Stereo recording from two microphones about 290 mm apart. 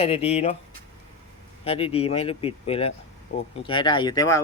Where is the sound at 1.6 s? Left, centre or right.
Centre.